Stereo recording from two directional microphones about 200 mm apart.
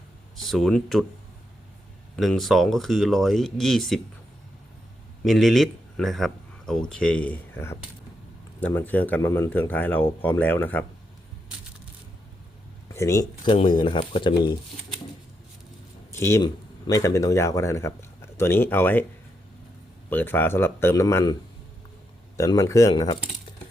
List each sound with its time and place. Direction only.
0.4 s speech: centre (ahead or behind)
2.1 s speech: centre (ahead or behind)
5.2 s a man's voice: centre (ahead or behind)
12.9 s speech: 15° left (ahead or behind)
16.1 s speech: 15° left (ahead or behind)
20.1 s speech: 10° left (ahead or behind)
22.4 s speech: 15° left (ahead or behind)